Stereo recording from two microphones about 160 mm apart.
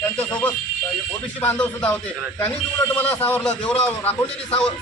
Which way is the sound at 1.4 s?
10° left (ahead or behind).